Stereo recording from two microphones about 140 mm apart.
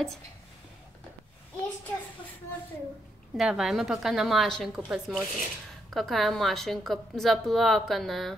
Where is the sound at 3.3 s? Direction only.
5° right (ahead or behind).